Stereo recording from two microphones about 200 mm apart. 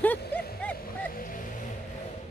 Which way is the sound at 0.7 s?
45° left (ahead or behind).